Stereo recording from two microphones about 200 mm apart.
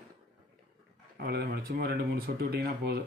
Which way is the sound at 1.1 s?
50° right (ahead or behind).